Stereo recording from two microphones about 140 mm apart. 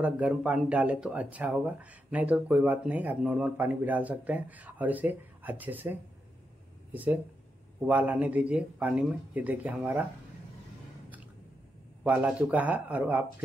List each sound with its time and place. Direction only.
0.0 s speech: 10° right (ahead or behind)
12.0 s speech: 10° right (ahead or behind)